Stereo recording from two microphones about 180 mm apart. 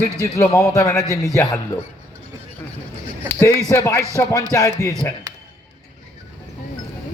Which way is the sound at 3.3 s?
15° left (ahead or behind).